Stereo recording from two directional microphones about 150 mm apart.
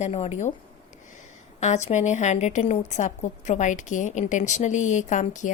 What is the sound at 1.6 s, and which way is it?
A woman's voice, 50° left (ahead or behind).